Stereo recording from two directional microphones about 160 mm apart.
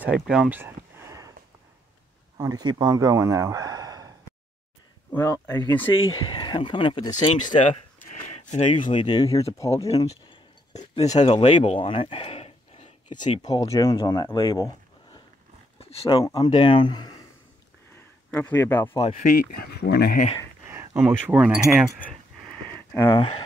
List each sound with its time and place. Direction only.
0.0 s a sound: 5° right (ahead or behind)
2.3 s speech: 25° right (ahead or behind)
5.1 s speech: 20° left (ahead or behind)
8.7 s speech: 30° left (ahead or behind)
10.7 s speech: 45° left (ahead or behind)
11.1 s speech: 30° left (ahead or behind)
15.8 s speech: 40° left (ahead or behind)
18.3 s speech: 10° left (ahead or behind)
19.1 s speech: 60° left (ahead or behind); by 20.2 s 90° left
20.6 s speech: 15° right (ahead or behind)
22.0 s a sound: 10° left (ahead or behind)
23.0 s speech: 30° left (ahead or behind)